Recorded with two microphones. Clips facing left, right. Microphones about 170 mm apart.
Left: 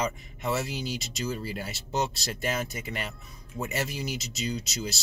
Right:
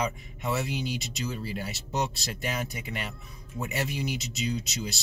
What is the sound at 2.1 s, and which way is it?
Speech, 40° left (ahead or behind).